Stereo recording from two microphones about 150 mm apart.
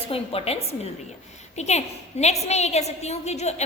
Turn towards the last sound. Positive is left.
turn(degrees=45)  # may be behind; listen again after turning